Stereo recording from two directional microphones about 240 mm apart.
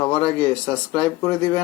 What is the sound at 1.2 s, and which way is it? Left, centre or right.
Speech, centre.